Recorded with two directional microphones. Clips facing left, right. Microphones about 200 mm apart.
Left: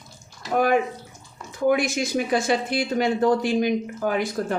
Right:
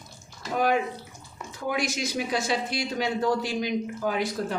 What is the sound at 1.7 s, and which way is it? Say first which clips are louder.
Speech: left 7 dB; 55° left (ahead or behind).